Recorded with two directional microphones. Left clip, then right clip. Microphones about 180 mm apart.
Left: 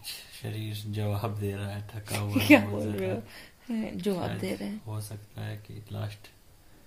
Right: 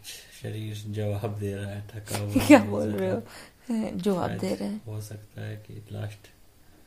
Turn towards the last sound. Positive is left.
turn(degrees=-5)  # may be behind; listen again after turning